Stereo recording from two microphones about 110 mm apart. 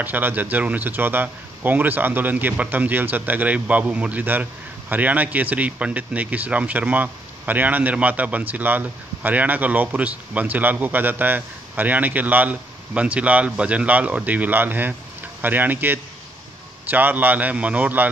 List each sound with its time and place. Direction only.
0.0 s speech: 15° right (ahead or behind)